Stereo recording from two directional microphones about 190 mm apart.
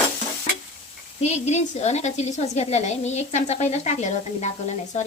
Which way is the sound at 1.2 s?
35° left (ahead or behind).